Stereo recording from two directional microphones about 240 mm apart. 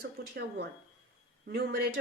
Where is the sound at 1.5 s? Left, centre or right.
Right.